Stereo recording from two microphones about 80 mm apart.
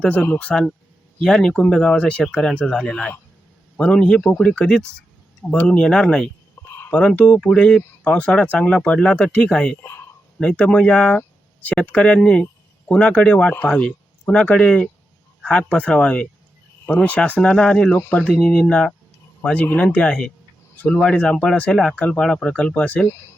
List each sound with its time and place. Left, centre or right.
0.0 s speech: centre
6.6 s a sound: left
6.9 s speech: centre